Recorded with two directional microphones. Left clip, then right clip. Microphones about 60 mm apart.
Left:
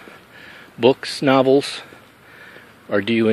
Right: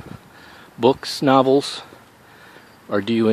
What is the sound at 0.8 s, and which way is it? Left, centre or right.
Speech, right.